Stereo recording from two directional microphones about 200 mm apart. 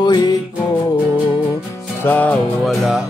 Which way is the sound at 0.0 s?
20° left (ahead or behind).